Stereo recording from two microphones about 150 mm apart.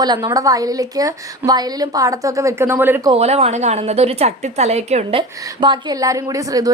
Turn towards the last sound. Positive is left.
turn(degrees=-25)  # may be behind; listen again after turning